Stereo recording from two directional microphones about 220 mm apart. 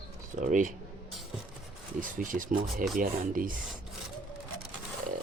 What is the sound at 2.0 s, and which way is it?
Speech, 35° right (ahead or behind).